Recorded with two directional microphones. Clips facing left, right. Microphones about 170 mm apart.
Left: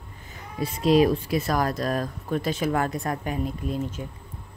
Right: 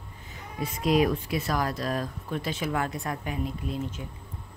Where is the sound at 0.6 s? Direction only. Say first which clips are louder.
Left 4 dB; 30° left (ahead or behind).